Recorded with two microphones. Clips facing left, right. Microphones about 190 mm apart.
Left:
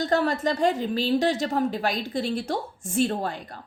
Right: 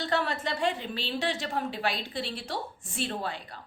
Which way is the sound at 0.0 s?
40° left (ahead or behind).